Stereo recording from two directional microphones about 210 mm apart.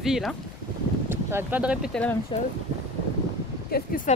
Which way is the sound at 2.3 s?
25° left (ahead or behind).